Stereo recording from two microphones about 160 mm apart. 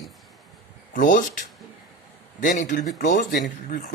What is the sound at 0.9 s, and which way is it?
Speech, 55° left (ahead or behind).